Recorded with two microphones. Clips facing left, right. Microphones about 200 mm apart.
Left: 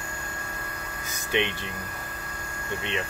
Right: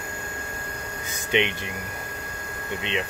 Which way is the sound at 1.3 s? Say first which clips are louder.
Right 3 dB; 20° right (ahead or behind).